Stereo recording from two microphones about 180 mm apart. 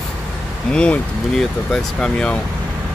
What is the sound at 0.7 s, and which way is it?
Speech, 5° left (ahead or behind).